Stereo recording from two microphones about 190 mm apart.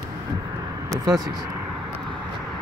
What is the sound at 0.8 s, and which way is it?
Vehicle, 20° right (ahead or behind).